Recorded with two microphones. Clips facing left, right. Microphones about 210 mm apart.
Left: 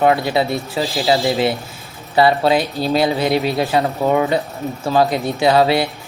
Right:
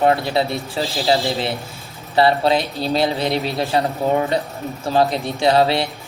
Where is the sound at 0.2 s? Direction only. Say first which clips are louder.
Left 2 dB; centre (ahead or behind).